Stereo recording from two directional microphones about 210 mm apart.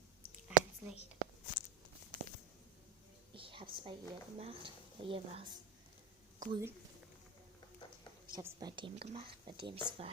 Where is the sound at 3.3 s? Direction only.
25° right (ahead or behind).